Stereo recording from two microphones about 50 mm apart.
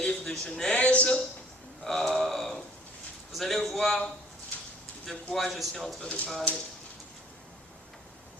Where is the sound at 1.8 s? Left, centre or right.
Centre.